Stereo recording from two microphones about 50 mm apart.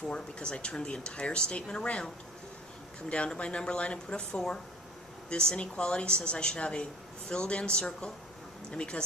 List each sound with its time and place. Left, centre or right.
0.1 s speech: left
3.1 s a woman's voice: left